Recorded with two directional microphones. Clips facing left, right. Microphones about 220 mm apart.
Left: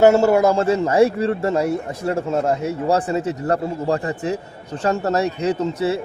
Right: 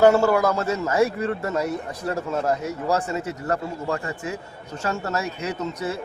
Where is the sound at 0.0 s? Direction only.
25° left (ahead or behind).